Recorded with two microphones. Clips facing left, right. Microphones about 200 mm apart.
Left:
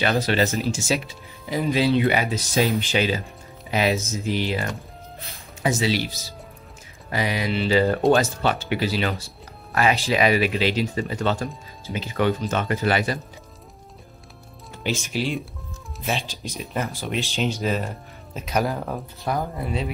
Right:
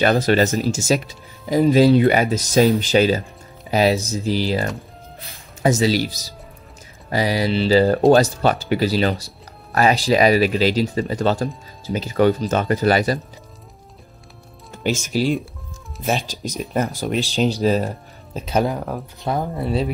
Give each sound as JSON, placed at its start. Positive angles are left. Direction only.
{"t": 0.0, "sound": "speech", "side_deg": -45}
{"t": 7.1, "sound": "speech", "side_deg": -35}
{"t": 14.8, "sound": "speech", "side_deg": -45}